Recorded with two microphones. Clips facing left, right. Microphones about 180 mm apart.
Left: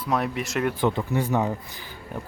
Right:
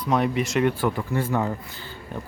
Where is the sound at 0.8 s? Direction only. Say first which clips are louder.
Left 1 dB; 20° left (ahead or behind).